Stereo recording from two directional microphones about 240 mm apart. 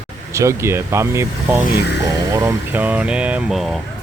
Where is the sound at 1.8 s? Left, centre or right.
Left.